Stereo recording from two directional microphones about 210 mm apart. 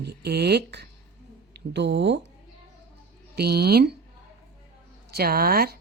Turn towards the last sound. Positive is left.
turn(degrees=-45)  # may be behind; listen again after turning